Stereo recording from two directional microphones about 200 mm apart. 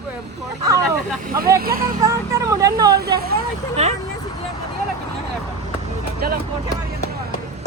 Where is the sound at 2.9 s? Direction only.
50° right (ahead or behind).